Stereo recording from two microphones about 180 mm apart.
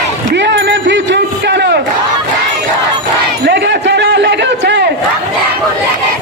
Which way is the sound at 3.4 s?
70° right (ahead or behind).